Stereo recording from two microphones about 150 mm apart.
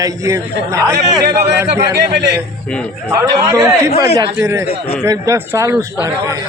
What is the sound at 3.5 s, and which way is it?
A man's voice, 20° right (ahead or behind).